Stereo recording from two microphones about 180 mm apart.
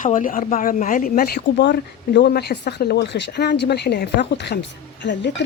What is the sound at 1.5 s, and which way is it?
Speech, 75° left (ahead or behind).